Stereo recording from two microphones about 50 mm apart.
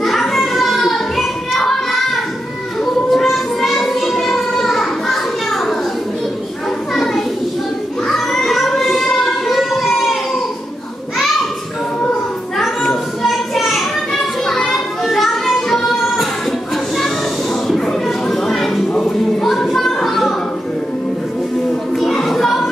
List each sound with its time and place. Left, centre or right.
0.0 s children playing: centre
2.8 s child singing: centre
6.9 s children playing: centre
8.1 s music: centre
12.5 s children playing: centre
16.9 s a sound: centre
18.9 s music: centre
19.4 s a sound: centre
21.9 s music: centre